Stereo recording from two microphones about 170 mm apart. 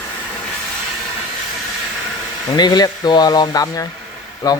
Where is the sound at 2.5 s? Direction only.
25° left (ahead or behind).